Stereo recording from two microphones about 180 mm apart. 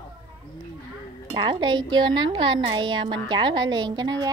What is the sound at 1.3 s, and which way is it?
A woman's voice, 25° right (ahead or behind).